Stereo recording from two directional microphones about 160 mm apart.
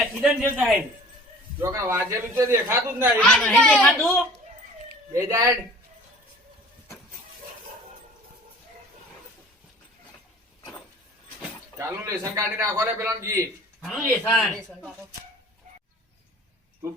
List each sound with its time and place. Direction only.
0.0 s a man's voice: 5° right (ahead or behind)
1.5 s a man's voice: 15° right (ahead or behind)
3.2 s a woman's voice: 5° left (ahead or behind)
5.1 s a man's voice: 20° right (ahead or behind)
11.8 s a man's voice: 15° right (ahead or behind)
13.8 s a woman's voice: centre (ahead or behind)